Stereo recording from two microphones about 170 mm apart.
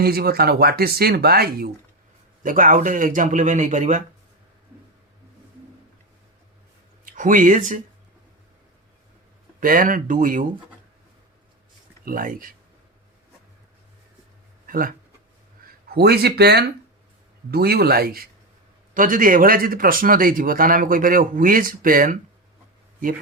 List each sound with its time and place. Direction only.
0.0 s speech: 65° right (ahead or behind)
2.4 s speech: 50° right (ahead or behind)
7.0 s speech: 50° right (ahead or behind)
9.6 s speech: 50° right (ahead or behind)
12.0 s speech: 55° right (ahead or behind)
14.7 s speech: 55° right (ahead or behind)
15.9 s speech: 70° right (ahead or behind)